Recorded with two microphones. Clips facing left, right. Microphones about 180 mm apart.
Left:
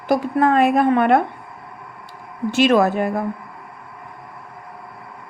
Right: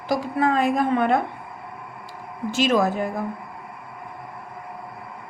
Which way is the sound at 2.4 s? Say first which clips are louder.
Left 5 dB; 65° left (ahead or behind).